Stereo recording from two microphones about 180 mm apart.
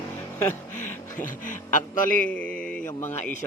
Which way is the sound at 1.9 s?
50° left (ahead or behind).